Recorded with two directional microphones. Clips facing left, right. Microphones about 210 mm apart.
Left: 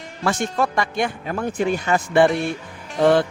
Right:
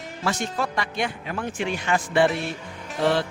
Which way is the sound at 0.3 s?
50° left (ahead or behind).